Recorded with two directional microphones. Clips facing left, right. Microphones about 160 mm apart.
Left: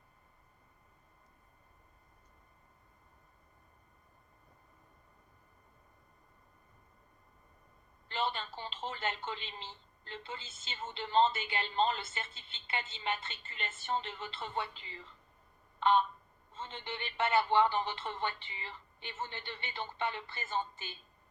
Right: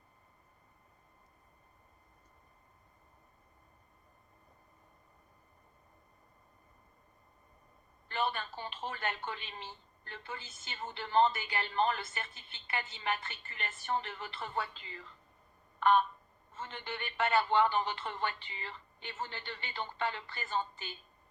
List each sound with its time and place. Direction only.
8.0 s a woman's voice: 25° left (ahead or behind)
15.8 s a sound: 25° left (ahead or behind)
16.5 s a woman's voice: 20° left (ahead or behind)